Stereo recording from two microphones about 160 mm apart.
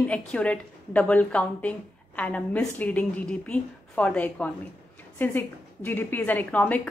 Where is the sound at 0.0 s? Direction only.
5° left (ahead or behind).